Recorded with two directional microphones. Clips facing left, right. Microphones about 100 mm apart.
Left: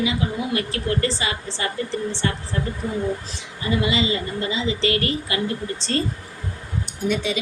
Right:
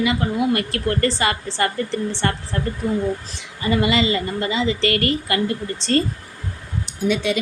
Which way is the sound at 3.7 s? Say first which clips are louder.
Right 3 dB; 60° right (ahead or behind).